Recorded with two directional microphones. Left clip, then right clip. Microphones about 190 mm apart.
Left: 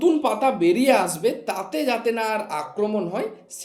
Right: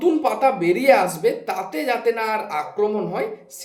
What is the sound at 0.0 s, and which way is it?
Speech, 50° left (ahead or behind).